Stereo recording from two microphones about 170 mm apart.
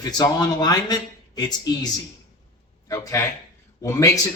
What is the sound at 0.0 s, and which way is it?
Speech, 25° left (ahead or behind).